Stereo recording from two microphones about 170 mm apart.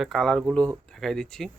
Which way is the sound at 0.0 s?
Centre (ahead or behind).